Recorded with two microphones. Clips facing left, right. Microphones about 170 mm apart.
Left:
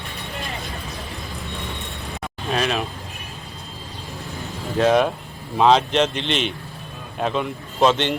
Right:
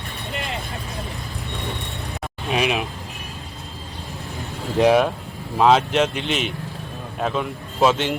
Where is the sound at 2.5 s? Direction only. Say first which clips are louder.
Right 1 dB; 10° right (ahead or behind).